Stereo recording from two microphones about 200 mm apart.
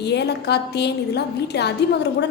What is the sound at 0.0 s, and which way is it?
A woman's voice, 55° left (ahead or behind).